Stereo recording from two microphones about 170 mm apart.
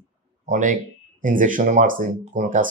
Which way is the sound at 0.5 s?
50° right (ahead or behind).